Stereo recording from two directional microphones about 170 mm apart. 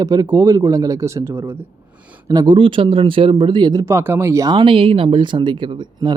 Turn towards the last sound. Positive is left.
turn(degrees=-25)  # may be behind; listen again after turning